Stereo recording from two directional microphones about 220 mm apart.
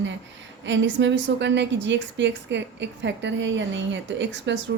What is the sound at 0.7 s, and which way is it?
A woman's voice, 55° right (ahead or behind).